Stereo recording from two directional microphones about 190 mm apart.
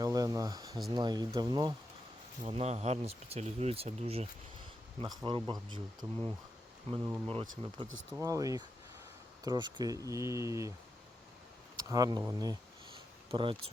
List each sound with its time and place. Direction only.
0.0 s a sound: 20° right (ahead or behind)
0.9 s speech: 20° right (ahead or behind)
4.9 s speech: 25° right (ahead or behind)
7.6 s speech: 30° right (ahead or behind)
8.2 s speech: 20° right (ahead or behind)
11.8 s speech: 20° right (ahead or behind)